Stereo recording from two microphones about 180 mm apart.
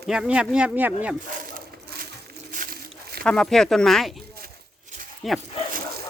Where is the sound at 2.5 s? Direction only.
55° right (ahead or behind).